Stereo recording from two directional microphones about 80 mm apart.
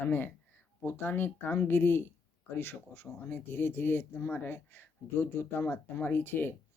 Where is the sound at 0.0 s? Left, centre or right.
Left.